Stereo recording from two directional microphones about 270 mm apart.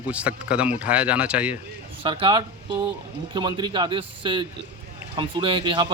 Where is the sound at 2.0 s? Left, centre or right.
Centre.